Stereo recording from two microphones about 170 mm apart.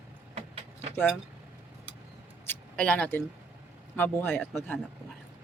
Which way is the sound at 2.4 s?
10° left (ahead or behind).